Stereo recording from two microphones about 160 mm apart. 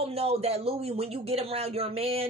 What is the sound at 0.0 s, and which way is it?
A woman's voice, 40° right (ahead or behind).